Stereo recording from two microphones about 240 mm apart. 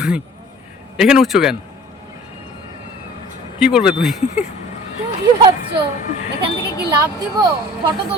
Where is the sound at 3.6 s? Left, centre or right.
Centre.